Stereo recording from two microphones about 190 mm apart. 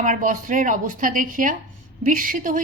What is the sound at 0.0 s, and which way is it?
A woman's voice, 45° right (ahead or behind).